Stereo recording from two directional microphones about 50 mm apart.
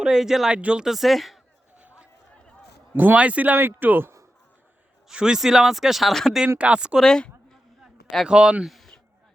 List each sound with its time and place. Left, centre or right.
0.0 s speech: centre
0.5 s speech: right
0.9 s speech: centre
2.9 s a man's voice: right
3.2 s speech: right
5.1 s speech: centre
6.6 s speech: right
7.0 s a sound: centre
8.3 s speech: centre
8.6 s a sound: centre